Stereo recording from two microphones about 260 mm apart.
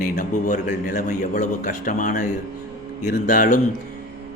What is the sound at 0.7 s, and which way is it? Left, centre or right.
A man's voice, left.